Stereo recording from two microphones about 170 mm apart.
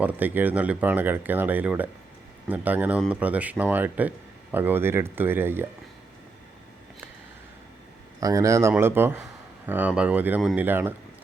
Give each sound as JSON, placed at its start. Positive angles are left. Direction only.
{"t": 0.0, "sound": "speech", "side_deg": -10}
{"t": 8.2, "sound": "speech", "side_deg": -20}